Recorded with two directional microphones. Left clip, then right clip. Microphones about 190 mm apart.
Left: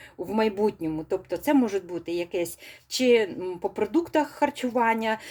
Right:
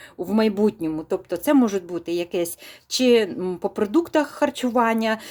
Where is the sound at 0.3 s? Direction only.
25° right (ahead or behind).